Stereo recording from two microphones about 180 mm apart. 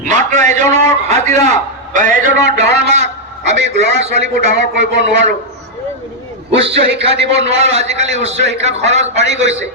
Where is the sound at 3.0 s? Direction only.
40° right (ahead or behind).